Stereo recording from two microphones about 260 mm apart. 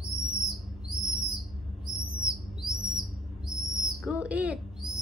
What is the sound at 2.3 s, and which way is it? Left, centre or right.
Owl, centre.